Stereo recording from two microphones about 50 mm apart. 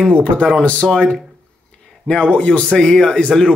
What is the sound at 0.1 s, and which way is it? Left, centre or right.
Speech, left.